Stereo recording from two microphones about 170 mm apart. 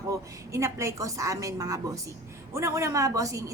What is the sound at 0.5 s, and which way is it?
A woman's voice, 15° right (ahead or behind).